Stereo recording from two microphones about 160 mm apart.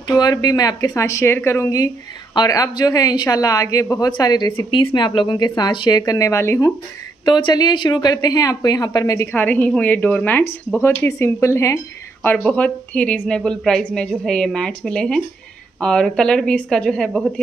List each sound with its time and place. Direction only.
0.1 s a woman's voice: 25° left (ahead or behind)
7.2 s a woman's voice: 30° left (ahead or behind)
9.3 s a woman's voice: 10° left (ahead or behind)